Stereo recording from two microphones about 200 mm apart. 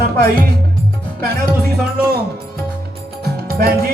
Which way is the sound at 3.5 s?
50° right (ahead or behind).